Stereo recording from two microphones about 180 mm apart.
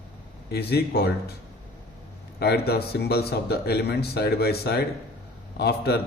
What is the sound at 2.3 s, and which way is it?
A man's voice, 60° left (ahead or behind).